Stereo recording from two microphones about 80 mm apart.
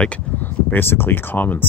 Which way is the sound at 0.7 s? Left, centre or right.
Left.